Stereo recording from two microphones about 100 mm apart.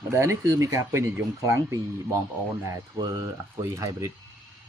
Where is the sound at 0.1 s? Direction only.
30° right (ahead or behind).